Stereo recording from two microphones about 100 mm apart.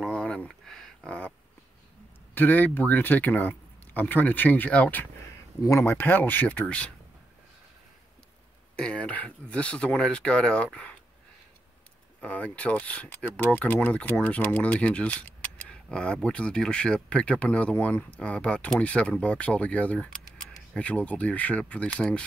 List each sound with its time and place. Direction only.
0.1 s a sound: 10° left (ahead or behind)
2.3 s speech: 20° left (ahead or behind)
5.6 s speech: 30° left (ahead or behind); by 6.9 s 10° left (ahead or behind)
8.7 s speech: 10° left (ahead or behind)
12.2 s speech: 15° left (ahead or behind)